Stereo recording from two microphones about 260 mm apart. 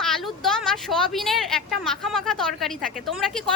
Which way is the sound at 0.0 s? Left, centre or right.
Centre.